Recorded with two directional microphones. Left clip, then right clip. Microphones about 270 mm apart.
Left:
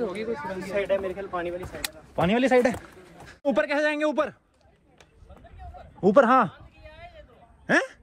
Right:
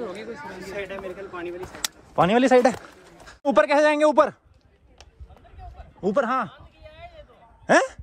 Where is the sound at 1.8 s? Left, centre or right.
Centre.